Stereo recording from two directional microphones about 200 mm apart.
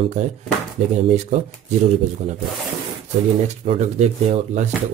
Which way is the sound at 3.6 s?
35° right (ahead or behind).